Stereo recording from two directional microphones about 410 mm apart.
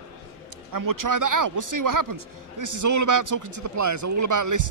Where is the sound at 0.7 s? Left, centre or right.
Right.